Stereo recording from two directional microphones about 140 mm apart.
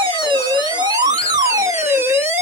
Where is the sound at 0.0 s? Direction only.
35° right (ahead or behind).